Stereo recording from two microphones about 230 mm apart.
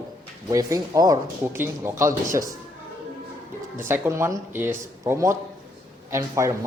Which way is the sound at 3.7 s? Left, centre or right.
Centre.